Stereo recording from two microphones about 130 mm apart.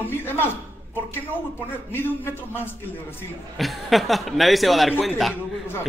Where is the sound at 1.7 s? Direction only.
15° left (ahead or behind).